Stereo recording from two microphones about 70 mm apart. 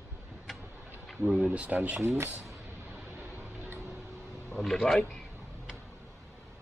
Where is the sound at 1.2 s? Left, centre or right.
Right.